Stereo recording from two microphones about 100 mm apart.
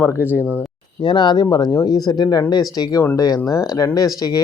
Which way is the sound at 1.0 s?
50° left (ahead or behind).